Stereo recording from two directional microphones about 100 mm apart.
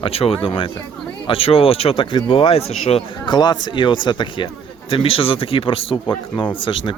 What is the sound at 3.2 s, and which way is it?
Speech, 50° left (ahead or behind).